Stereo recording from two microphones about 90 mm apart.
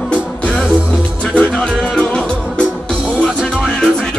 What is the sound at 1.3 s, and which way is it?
Music, 5° left (ahead or behind).